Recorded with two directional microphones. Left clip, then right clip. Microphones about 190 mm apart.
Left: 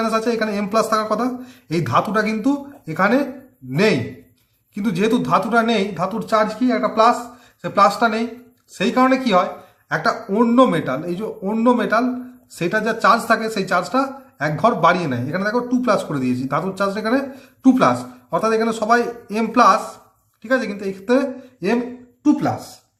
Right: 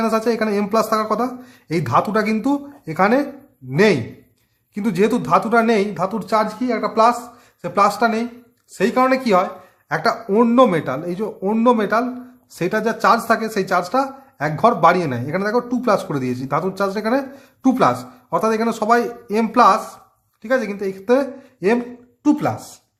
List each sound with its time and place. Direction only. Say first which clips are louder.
0.0 s speech: right 1 dB; 35° right (ahead or behind)